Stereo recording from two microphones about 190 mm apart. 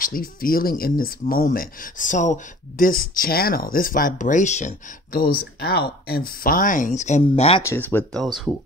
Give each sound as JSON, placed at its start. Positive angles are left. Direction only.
{"t": 0.0, "sound": "speech", "side_deg": 50}
{"t": 7.6, "sound": "speech", "side_deg": 10}